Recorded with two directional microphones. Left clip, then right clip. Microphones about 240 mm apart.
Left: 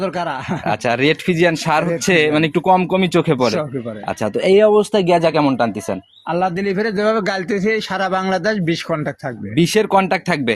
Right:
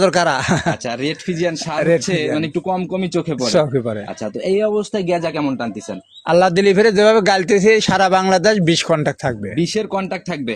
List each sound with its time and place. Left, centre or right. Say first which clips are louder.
0.0 s speech: right 7 dB; right
0.9 s speech: left 6 dB; left
6.2 s a man's voice: right 6 dB; right
9.6 s speech: left 9 dB; left